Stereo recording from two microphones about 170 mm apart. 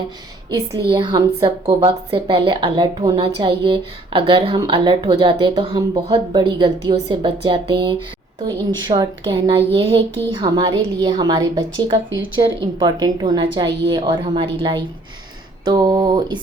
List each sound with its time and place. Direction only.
0.9 s a woman's voice: 25° right (ahead or behind)